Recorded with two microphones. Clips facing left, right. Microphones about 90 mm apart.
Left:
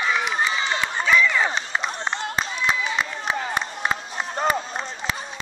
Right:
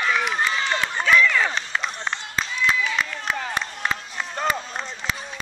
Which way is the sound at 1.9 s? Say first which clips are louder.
Left 2 dB; 25° left (ahead or behind).